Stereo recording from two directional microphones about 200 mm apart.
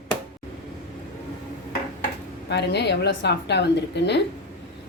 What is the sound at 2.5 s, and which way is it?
A woman's voice, 55° left (ahead or behind).